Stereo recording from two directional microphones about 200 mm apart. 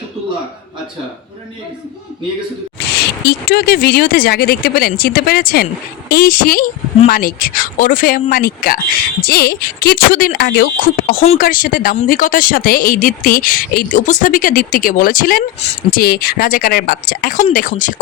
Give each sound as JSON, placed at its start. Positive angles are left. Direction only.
{"t": 2.7, "sound": "speech", "side_deg": 55}
{"t": 11.2, "sound": "speech", "side_deg": 30}
{"t": 11.4, "sound": "speech", "side_deg": 45}